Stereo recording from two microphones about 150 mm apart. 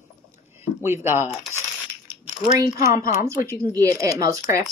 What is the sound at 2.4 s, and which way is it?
A woman's voice, 20° right (ahead or behind).